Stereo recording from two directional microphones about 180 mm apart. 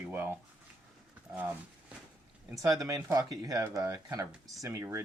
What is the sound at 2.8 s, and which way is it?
Speech, 20° right (ahead or behind).